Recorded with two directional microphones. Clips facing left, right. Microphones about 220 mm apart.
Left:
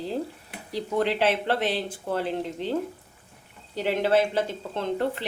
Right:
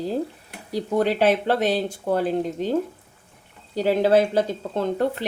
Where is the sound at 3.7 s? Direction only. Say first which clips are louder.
Right 5 dB; 40° right (ahead or behind).